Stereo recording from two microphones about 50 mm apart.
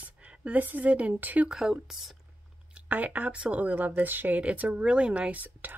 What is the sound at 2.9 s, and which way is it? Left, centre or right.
Speech, right.